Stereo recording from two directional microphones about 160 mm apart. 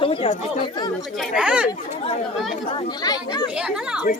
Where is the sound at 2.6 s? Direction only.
30° left (ahead or behind).